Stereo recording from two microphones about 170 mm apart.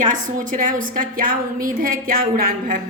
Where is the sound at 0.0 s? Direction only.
50° right (ahead or behind).